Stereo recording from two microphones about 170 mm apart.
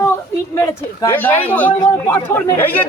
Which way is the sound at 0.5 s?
15° left (ahead or behind).